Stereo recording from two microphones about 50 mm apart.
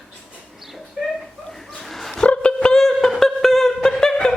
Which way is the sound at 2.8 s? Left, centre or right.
Centre.